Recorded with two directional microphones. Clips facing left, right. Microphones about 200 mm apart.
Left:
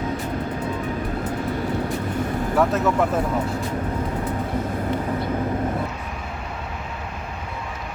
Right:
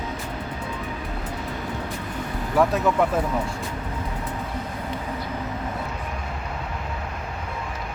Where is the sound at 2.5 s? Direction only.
Centre (ahead or behind).